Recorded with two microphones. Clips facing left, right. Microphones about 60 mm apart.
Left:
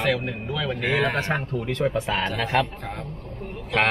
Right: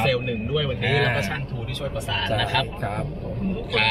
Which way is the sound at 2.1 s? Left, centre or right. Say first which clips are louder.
Left 1 dB; left.